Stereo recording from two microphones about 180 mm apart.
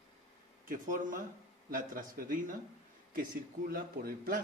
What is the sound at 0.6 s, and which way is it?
A man's voice, 50° right (ahead or behind).